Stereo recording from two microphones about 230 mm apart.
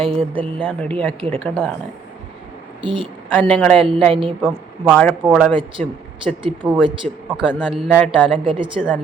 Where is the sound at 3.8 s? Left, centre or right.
Right.